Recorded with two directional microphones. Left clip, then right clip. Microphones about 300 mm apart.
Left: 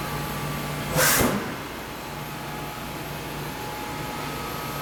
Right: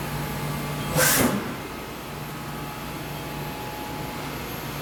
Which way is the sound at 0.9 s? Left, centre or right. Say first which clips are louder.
Even; centre.